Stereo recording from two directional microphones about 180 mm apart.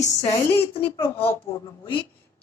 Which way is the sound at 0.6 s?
30° left (ahead or behind).